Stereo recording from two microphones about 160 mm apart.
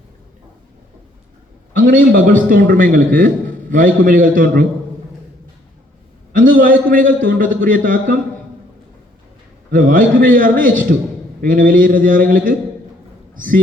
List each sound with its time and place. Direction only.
1.7 s a man's voice: 60° right (ahead or behind)
6.3 s a man's voice: 60° right (ahead or behind)
9.7 s a man's voice: 60° right (ahead or behind)